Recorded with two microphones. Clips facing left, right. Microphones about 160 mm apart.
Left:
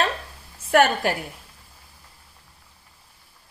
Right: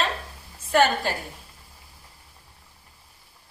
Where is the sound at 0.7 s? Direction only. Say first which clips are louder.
Left 2 dB; 65° left (ahead or behind).